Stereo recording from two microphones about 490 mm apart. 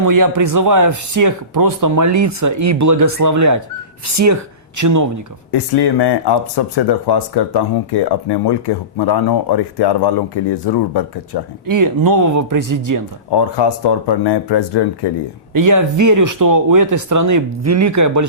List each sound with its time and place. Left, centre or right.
0.0 s speech: right
5.5 s speech: left
11.6 s speech: right
13.3 s speech: left
15.5 s speech: right